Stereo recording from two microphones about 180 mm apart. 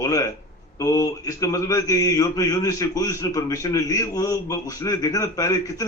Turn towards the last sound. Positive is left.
turn(degrees=20)  # may be behind; listen again after turning